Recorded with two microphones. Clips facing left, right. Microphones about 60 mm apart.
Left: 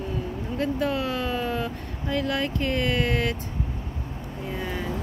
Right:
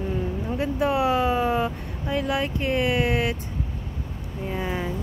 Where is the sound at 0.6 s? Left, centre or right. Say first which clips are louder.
Right 3 dB; centre.